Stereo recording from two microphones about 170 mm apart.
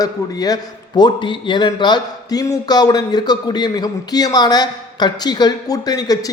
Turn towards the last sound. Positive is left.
turn(degrees=20)  # may be behind; listen again after turning